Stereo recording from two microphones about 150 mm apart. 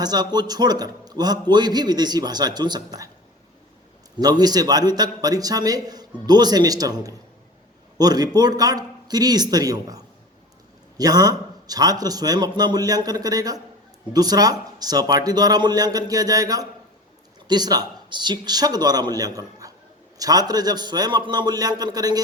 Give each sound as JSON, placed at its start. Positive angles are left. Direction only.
{"t": 0.0, "sound": "a man's voice", "side_deg": -25}
{"t": 4.2, "sound": "a man's voice", "side_deg": -25}
{"t": 19.4, "sound": "a sound", "side_deg": -25}
{"t": 20.1, "sound": "a man's voice", "side_deg": -25}